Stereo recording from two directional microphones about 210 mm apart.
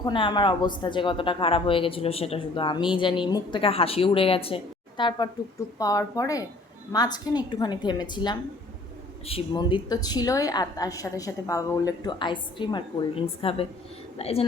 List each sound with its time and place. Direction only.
0.0 s a woman's voice: 20° left (ahead or behind)